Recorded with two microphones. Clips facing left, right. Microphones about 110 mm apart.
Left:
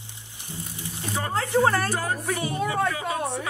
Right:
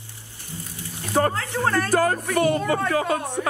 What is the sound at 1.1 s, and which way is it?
Speech, 60° right (ahead or behind).